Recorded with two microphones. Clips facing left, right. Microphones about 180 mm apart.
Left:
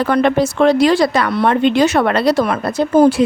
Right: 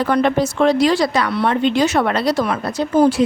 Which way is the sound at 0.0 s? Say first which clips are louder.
Left 2 dB; 65° left (ahead or behind).